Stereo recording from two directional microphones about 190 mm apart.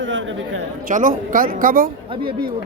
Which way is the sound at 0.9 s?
45° right (ahead or behind).